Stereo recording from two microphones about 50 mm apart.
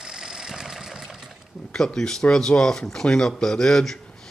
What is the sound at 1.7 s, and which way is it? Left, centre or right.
Speech, centre.